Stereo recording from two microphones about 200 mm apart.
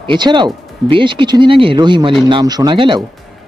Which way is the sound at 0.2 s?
20° right (ahead or behind).